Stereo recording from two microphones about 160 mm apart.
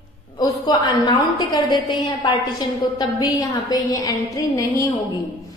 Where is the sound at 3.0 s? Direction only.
25° left (ahead or behind).